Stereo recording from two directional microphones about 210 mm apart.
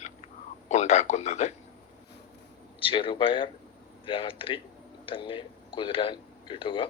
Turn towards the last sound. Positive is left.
turn(degrees=25)  # may be behind; listen again after turning